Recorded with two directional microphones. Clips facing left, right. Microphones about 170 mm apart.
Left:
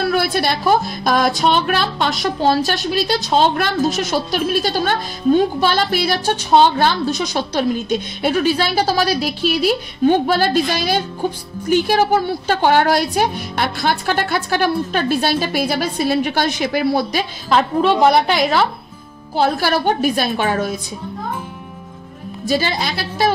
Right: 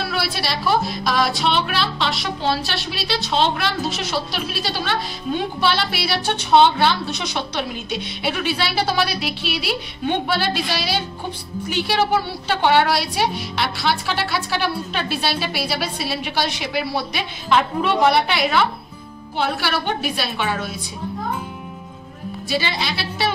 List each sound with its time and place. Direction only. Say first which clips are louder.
0.0 s a woman's voice: left 7 dB; 50° left (ahead or behind)
22.5 s a woman's voice: left 5 dB; 45° left (ahead or behind)